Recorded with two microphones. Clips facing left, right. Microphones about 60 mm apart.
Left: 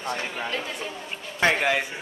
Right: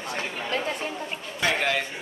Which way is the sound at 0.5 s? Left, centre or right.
Right.